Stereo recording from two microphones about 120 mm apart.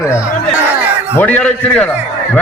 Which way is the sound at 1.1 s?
10° left (ahead or behind).